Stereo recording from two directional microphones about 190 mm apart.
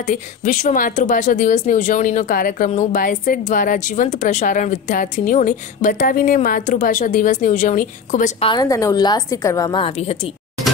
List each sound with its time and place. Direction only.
0.0 s a woman's voice: 40° left (ahead or behind)
8.5 s a woman's voice: 20° left (ahead or behind)